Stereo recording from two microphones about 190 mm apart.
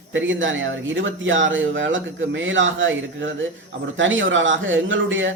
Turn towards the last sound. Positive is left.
turn(degrees=-80)